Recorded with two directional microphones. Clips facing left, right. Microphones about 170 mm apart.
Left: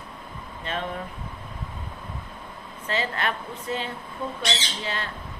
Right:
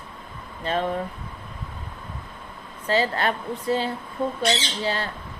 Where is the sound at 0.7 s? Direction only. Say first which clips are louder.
Right 6 dB; 35° right (ahead or behind).